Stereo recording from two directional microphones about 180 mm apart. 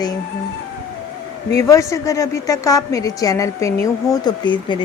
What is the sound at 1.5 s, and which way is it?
A woman's voice, 15° left (ahead or behind).